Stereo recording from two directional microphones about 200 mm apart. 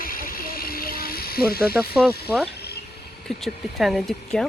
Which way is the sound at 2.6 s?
55° left (ahead or behind).